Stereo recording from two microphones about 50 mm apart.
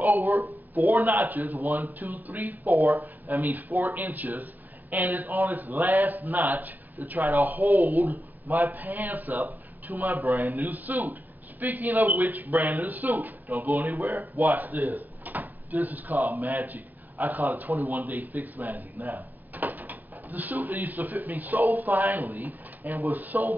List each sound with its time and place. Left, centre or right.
0.0 s speech: right
13.9 s speech: right
14.2 s speech: right